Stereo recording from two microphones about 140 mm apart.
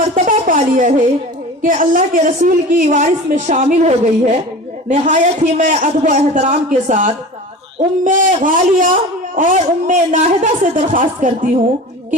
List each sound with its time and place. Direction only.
0.1 s a sound: 70° right (ahead or behind)
1.6 s a woman's voice: 75° right (ahead or behind)
8.0 s speech: 70° right (ahead or behind)